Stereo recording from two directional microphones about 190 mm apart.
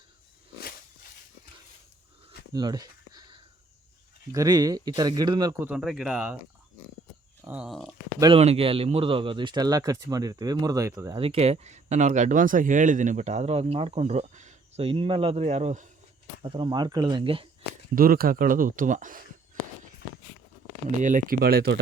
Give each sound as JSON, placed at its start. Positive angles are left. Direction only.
{"t": 2.5, "sound": "a sound", "side_deg": -20}
{"t": 4.3, "sound": "speech", "side_deg": -20}
{"t": 5.6, "sound": "speech", "side_deg": -5}
{"t": 7.4, "sound": "speech", "side_deg": -5}
{"t": 8.2, "sound": "speech", "side_deg": -30}
{"t": 11.2, "sound": "speech", "side_deg": -30}
{"t": 16.4, "sound": "speech", "side_deg": -25}
{"t": 17.9, "sound": "speech", "side_deg": -50}
{"t": 21.0, "sound": "speech", "side_deg": -45}